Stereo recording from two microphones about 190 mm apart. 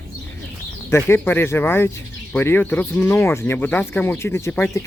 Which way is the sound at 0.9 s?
10° left (ahead or behind).